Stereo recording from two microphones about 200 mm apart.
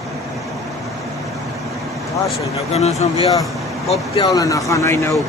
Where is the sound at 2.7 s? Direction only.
35° left (ahead or behind).